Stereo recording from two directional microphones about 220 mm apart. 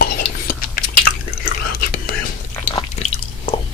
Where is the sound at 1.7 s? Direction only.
40° left (ahead or behind).